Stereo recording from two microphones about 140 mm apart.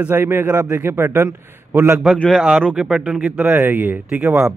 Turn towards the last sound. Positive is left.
turn(degrees=-15)  # may be behind; listen again after turning